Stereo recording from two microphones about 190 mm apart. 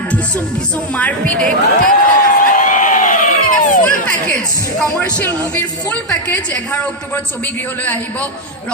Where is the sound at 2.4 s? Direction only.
45° left (ahead or behind).